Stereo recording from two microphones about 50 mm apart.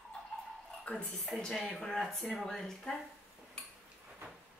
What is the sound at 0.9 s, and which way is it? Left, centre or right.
Speech, left.